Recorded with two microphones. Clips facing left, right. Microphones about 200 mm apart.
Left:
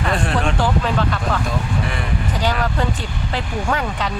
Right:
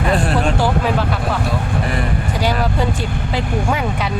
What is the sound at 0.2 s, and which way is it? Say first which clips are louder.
Speech: right 3 dB; 35° right (ahead or behind).